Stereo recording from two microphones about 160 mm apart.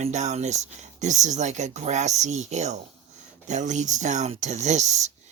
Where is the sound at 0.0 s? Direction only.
45° right (ahead or behind).